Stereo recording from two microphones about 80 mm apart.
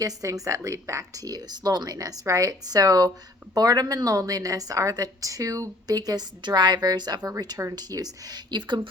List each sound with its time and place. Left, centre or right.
0.0 s a woman's voice: right